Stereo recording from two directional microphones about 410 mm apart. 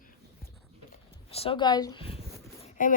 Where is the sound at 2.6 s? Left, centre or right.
Centre.